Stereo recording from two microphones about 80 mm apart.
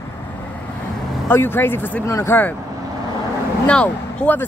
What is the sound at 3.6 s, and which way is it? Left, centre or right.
Speech, centre.